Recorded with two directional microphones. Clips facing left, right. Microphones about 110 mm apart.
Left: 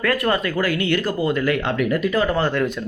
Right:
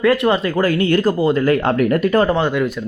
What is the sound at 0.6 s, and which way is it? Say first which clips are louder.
Speech: right 6 dB; 40° right (ahead or behind).